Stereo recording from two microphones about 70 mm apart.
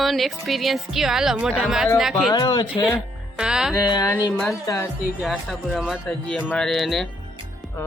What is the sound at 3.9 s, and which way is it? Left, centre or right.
Speech, left.